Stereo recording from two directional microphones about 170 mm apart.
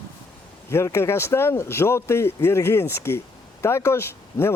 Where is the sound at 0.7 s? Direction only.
15° left (ahead or behind).